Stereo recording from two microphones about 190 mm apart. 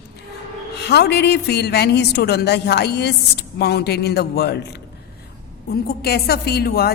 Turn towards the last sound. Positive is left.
turn(degrees=55)  # may be behind; listen again after turning